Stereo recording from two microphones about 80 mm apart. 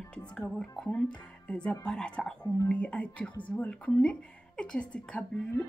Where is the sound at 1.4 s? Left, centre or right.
Centre.